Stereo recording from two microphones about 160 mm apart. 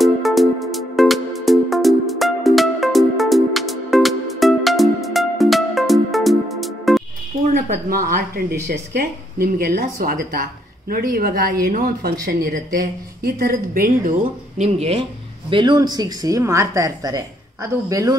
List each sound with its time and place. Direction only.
0.0 s music: centre (ahead or behind)
7.4 s speech: 50° right (ahead or behind)
8.9 s a woman's voice: 75° right (ahead or behind); by 14.1 s 60° right (ahead or behind)
14.6 s speech: 40° right (ahead or behind)
15.5 s speech: 30° right (ahead or behind)